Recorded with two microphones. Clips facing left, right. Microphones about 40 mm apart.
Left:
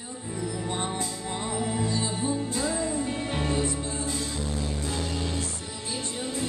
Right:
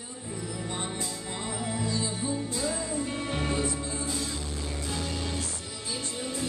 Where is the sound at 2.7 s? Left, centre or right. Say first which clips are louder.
Left 3 dB; centre.